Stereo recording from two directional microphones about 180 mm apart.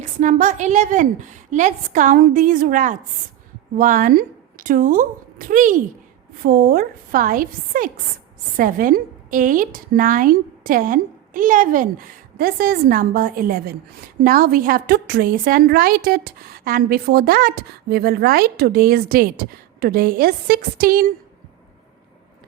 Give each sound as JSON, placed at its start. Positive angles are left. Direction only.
{"t": 0.0, "sound": "a woman's voice", "side_deg": -45}